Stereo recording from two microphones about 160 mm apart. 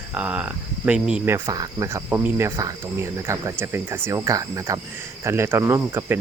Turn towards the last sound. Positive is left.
turn(degrees=-15)  # may be behind; listen again after turning